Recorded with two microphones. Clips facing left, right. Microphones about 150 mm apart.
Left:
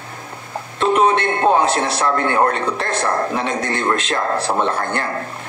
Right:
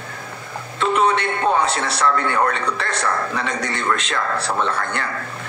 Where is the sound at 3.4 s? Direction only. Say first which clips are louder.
Left 3 dB; 45° left (ahead or behind).